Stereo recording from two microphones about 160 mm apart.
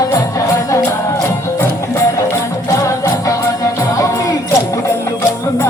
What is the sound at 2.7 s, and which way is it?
Music, 20° left (ahead or behind).